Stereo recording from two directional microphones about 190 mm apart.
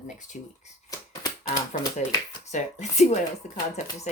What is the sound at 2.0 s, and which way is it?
Speech, 45° left (ahead or behind).